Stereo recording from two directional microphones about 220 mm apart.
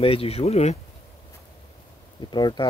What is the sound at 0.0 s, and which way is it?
Speech, 25° left (ahead or behind).